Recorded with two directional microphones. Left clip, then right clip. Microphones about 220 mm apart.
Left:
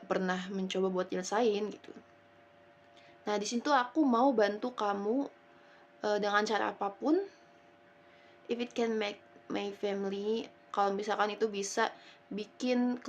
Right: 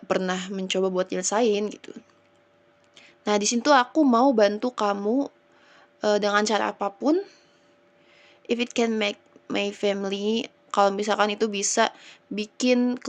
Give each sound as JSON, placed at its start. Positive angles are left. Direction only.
{"t": 0.1, "sound": "speech", "side_deg": -35}
{"t": 8.4, "sound": "speech", "side_deg": -35}